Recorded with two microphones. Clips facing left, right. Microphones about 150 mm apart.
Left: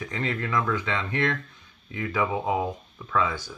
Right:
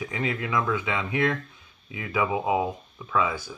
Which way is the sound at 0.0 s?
10° right (ahead or behind).